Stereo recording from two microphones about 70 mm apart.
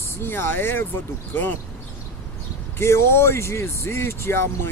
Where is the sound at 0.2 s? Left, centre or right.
Left.